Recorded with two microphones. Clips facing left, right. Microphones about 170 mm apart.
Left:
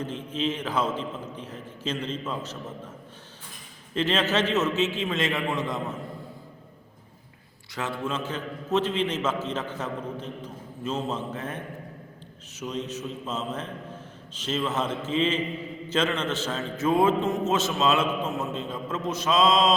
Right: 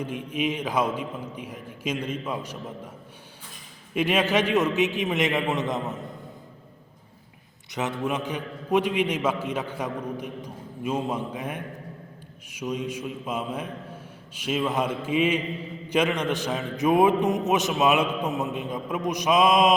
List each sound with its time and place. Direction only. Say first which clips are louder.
0.0 s a man's voice: right 1 dB; 10° right (ahead or behind)
3.9 s a man's voice: right 2 dB; 10° right (ahead or behind)
7.7 s a man's voice: right 3 dB; 20° right (ahead or behind)